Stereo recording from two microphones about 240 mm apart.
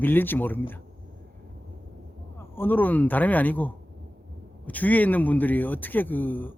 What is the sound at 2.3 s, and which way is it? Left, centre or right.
A man's voice, centre.